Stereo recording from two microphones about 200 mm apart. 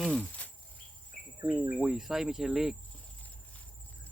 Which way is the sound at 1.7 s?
Centre (ahead or behind).